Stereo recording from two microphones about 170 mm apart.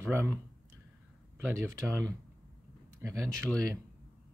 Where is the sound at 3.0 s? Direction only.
15° right (ahead or behind).